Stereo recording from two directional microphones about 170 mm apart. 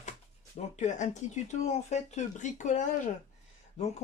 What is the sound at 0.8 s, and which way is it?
Speech, 45° left (ahead or behind).